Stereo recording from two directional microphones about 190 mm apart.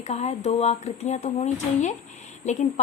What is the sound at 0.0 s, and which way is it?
Speech, 35° left (ahead or behind).